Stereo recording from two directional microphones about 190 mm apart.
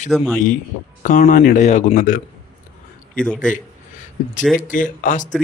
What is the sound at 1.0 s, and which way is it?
Speech, 45° left (ahead or behind).